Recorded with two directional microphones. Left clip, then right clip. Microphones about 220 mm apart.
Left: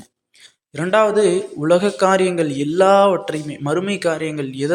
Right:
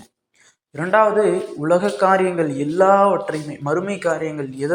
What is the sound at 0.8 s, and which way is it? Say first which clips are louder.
Speech: even; 25° left (ahead or behind).